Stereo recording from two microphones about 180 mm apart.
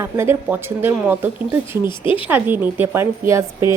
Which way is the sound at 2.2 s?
10° right (ahead or behind).